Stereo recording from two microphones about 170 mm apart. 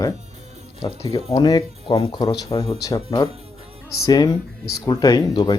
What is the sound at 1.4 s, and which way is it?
Speech, 25° left (ahead or behind).